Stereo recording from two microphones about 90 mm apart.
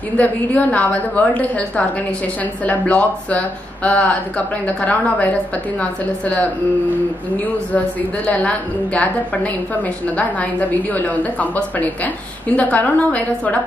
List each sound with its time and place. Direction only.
0.2 s a woman's voice: 15° left (ahead or behind)
8.3 s a woman's voice: 15° left (ahead or behind)